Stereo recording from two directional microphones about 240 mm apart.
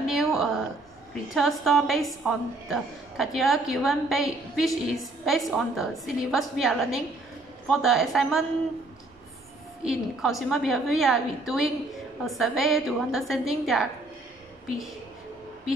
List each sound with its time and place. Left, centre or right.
0.0 s a sound: centre
1.3 s a woman's voice: centre
9.8 s a woman's voice: centre